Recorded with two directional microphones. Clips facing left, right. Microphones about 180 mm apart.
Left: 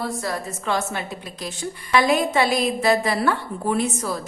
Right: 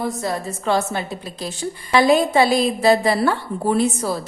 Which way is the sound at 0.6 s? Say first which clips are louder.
Right 5 dB; 35° right (ahead or behind).